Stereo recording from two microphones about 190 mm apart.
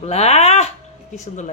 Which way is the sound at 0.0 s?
35° left (ahead or behind).